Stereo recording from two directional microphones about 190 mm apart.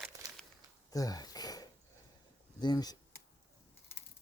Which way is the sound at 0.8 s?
20° left (ahead or behind).